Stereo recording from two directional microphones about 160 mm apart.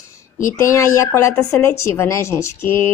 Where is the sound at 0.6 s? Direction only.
20° left (ahead or behind).